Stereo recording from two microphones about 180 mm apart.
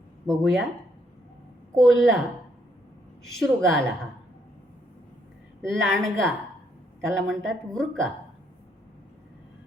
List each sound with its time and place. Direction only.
0.3 s a woman's voice: centre (ahead or behind)
1.8 s a woman's voice: centre (ahead or behind)
3.3 s a woman's voice: centre (ahead or behind)
5.6 s a woman's voice: 5° left (ahead or behind)